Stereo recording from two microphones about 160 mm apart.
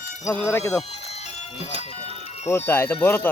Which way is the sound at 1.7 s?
35° right (ahead or behind).